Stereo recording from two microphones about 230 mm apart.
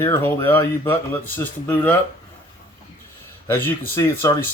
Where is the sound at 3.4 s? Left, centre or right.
Centre.